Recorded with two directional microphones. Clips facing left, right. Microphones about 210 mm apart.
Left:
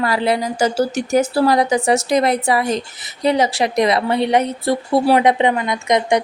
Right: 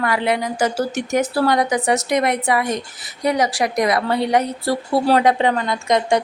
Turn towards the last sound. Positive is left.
turn(degrees=20)  # may be behind; listen again after turning